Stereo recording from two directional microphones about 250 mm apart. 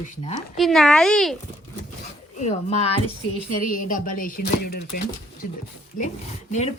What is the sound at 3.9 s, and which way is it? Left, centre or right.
Speech, left.